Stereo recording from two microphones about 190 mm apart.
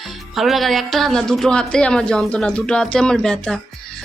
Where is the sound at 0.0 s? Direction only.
Centre (ahead or behind).